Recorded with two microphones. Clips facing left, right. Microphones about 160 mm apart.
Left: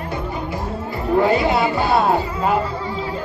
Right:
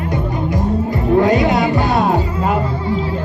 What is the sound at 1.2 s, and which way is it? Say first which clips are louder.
Music: right 3 dB; 20° right (ahead or behind).